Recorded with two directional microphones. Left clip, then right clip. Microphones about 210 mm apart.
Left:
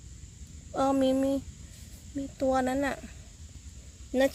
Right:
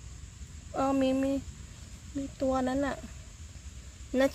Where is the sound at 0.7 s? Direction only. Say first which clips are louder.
Left 2 dB; 10° left (ahead or behind).